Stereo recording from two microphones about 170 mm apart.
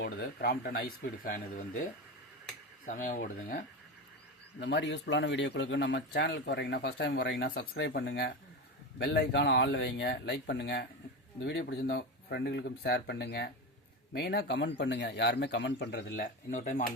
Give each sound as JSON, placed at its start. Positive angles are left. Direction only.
{"t": 0.0, "sound": "speech", "side_deg": 70}
{"t": 2.8, "sound": "speech", "side_deg": 50}
{"t": 4.6, "sound": "speech", "side_deg": 90}
{"t": 7.7, "sound": "speech", "side_deg": 70}
{"t": 9.0, "sound": "speech", "side_deg": 90}
{"t": 16.5, "sound": "speech", "side_deg": 45}